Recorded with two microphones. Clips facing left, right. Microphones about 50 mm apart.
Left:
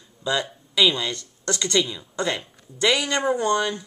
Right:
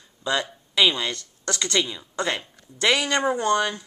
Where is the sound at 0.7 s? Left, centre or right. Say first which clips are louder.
Even; centre.